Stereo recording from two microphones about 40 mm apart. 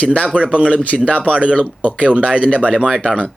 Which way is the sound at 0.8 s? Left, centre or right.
Left.